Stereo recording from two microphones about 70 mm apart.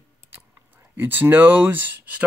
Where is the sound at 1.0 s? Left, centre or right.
Right.